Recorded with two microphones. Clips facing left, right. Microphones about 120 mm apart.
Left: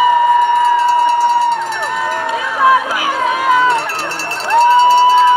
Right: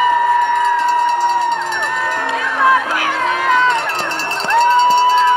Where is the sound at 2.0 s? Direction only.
10° left (ahead or behind).